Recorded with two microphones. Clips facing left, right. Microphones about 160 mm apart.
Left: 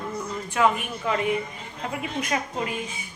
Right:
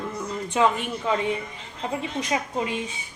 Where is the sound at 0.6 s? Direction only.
20° right (ahead or behind).